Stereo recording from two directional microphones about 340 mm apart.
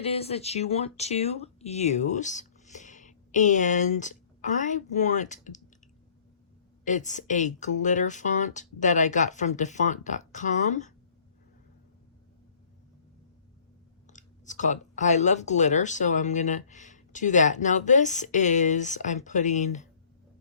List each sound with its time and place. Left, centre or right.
0.0 s speech: centre
6.8 s speech: left
14.1 s speech: left